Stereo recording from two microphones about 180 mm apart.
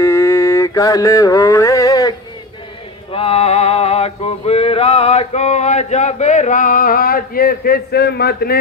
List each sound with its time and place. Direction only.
0.0 s mantra: 15° left (ahead or behind)
3.1 s male singing: 30° left (ahead or behind); by 8.5 s 60° left (ahead or behind)